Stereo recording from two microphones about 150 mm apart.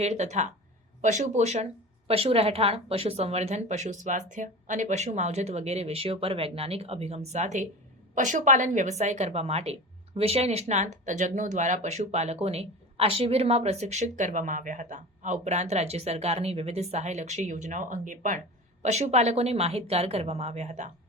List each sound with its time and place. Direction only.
0.0 s a woman's voice: 50° right (ahead or behind)